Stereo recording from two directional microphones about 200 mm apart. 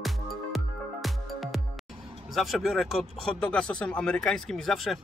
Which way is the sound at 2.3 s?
Centre (ahead or behind).